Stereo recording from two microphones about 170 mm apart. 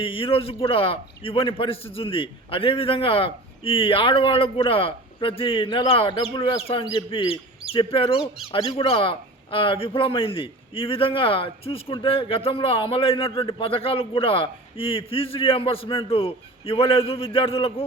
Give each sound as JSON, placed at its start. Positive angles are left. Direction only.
{"t": 0.0, "sound": "a man's voice", "side_deg": 35}